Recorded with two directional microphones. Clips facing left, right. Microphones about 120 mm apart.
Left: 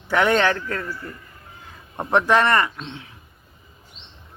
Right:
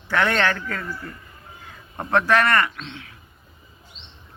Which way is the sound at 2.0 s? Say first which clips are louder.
Left 1 dB; 20° left (ahead or behind).